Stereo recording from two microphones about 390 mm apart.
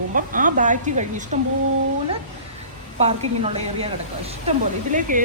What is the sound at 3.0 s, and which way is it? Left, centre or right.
A woman's voice, centre.